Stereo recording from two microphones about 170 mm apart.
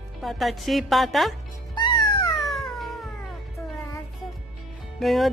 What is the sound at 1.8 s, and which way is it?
Music, 25° left (ahead or behind).